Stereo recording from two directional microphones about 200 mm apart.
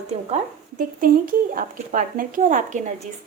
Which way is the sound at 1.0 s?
45° right (ahead or behind).